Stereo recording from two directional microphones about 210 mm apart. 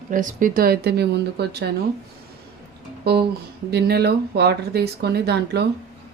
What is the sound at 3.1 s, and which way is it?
Speech, 50° right (ahead or behind).